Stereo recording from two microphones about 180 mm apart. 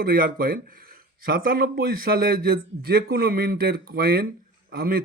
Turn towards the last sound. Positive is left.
turn(degrees=-55)  # may be behind; listen again after turning